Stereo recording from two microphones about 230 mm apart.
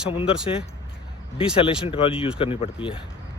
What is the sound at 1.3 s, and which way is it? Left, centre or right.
Speech, left.